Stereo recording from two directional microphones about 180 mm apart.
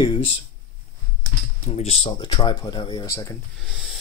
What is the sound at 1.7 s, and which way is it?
Speech, 35° left (ahead or behind).